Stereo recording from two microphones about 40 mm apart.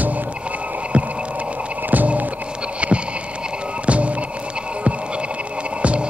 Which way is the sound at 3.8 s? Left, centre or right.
Right.